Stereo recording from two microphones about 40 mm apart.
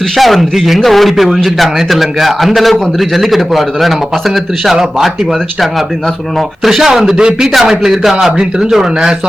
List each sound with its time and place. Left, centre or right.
0.2 s a man's voice: centre
6.7 s a man's voice: centre